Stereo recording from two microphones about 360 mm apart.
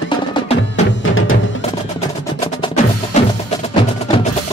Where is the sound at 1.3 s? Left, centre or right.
Centre.